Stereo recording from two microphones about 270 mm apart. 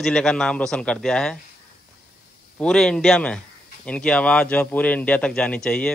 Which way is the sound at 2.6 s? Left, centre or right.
Centre.